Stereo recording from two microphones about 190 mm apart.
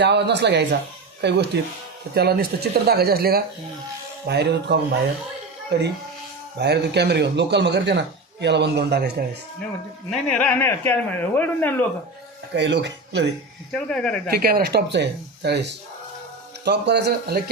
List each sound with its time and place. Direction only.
0.0 s speech: 65° right (ahead or behind)
10.1 s speech: 5° left (ahead or behind)
12.5 s speech: 65° right (ahead or behind)
13.7 s speech: 5° left (ahead or behind)
14.3 s speech: 50° right (ahead or behind)
16.6 s speech: 65° right (ahead or behind)